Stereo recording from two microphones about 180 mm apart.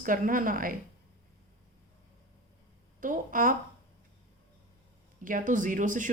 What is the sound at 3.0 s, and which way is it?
Speech, 50° right (ahead or behind).